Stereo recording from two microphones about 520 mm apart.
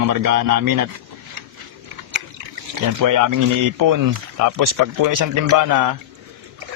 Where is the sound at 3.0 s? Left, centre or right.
Right.